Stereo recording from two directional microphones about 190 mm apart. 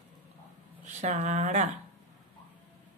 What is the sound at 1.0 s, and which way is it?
Speech, 40° right (ahead or behind).